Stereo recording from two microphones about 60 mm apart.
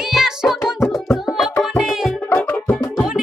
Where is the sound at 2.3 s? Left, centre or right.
Left.